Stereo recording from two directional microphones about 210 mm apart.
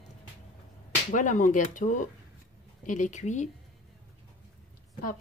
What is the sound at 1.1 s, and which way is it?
A woman's voice, 40° left (ahead or behind).